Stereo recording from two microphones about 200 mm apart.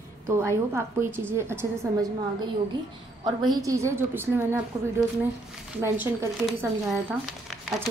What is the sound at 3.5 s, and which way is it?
Speech, 15° right (ahead or behind).